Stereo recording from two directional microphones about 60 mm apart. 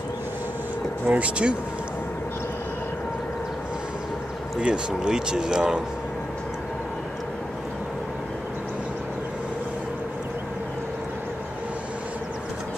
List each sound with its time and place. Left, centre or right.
1.0 s speech: right
4.6 s speech: centre